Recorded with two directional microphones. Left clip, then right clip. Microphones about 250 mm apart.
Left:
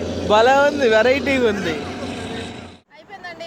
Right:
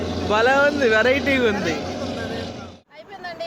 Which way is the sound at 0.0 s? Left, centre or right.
Centre.